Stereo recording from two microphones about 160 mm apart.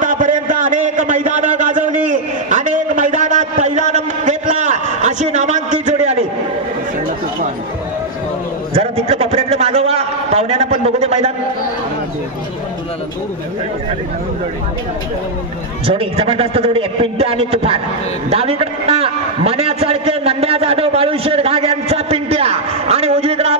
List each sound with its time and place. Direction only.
0.0 s a sound: 55° right (ahead or behind)
8.7 s a man's voice: 40° right (ahead or behind)
15.9 s a man's voice: 35° right (ahead or behind)